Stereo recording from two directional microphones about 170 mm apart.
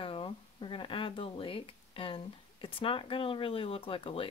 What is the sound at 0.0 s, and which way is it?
Speech, 30° left (ahead or behind).